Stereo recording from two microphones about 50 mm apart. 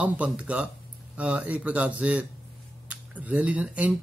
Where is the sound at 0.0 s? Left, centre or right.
Right.